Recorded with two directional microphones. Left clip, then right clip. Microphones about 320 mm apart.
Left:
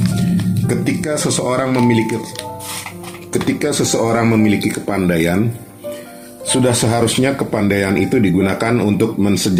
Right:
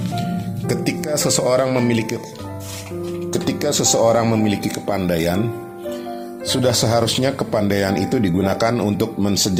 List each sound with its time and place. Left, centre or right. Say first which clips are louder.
0.7 s speech: left 2 dB; right
3.6 s speech: right 3 dB; right
6.5 s speech: left 2 dB; right